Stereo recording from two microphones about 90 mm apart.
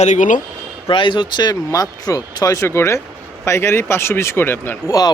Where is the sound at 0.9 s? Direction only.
65° left (ahead or behind); by 4.9 s 25° left (ahead or behind).